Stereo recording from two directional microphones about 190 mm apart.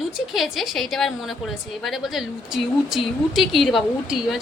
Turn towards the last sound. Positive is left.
turn(degrees=0)  # may be behind; listen again after turning